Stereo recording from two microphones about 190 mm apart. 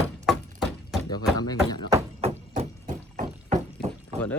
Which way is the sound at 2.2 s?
35° right (ahead or behind).